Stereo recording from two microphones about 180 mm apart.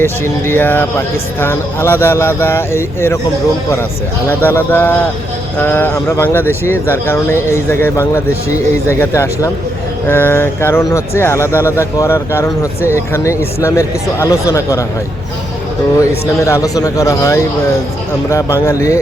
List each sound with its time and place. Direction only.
0.0 s speech: 10° left (ahead or behind)
4.3 s speech: 10° left (ahead or behind)
16.4 s speech: 15° left (ahead or behind)